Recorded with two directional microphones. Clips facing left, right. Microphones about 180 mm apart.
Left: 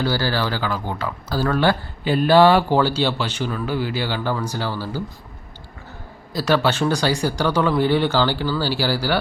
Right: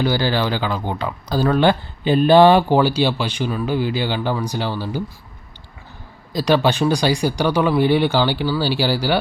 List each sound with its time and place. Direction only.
0.0 s speech: 20° right (ahead or behind)
6.3 s speech: 15° right (ahead or behind)